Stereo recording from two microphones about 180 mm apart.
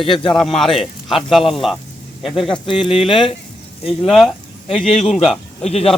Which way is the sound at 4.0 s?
Centre (ahead or behind).